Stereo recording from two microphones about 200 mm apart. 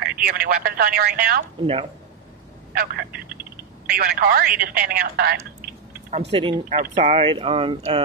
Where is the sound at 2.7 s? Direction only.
50° right (ahead or behind).